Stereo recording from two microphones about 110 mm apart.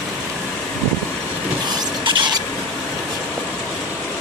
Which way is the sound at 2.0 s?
45° right (ahead or behind).